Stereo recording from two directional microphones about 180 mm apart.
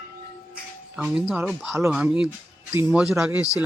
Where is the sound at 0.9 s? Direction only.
5° right (ahead or behind).